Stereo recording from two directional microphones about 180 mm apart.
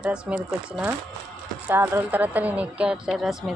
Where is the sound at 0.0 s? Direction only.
5° right (ahead or behind).